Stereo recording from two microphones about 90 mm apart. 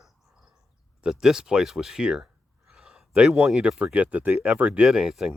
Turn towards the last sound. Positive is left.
turn(degrees=-5)  # may be behind; listen again after turning